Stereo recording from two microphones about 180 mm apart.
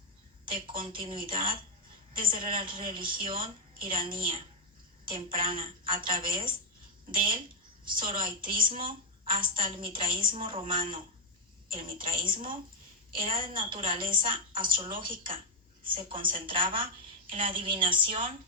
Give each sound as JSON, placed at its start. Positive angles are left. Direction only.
{"t": 0.8, "sound": "a woman's voice", "side_deg": -25}
{"t": 7.9, "sound": "a woman's voice", "side_deg": -25}